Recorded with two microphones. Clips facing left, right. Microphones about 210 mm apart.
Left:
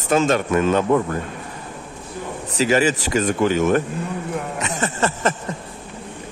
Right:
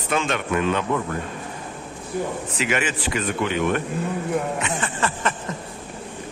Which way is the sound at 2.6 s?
40° left (ahead or behind).